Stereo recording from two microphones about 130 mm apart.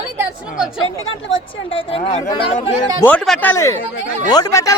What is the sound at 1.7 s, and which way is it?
Speech, 45° left (ahead or behind).